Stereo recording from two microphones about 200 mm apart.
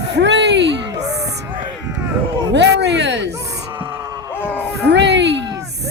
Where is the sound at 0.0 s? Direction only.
60° right (ahead or behind).